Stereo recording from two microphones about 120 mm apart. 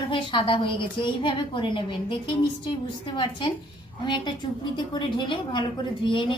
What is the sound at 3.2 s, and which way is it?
A woman's voice, 40° left (ahead or behind).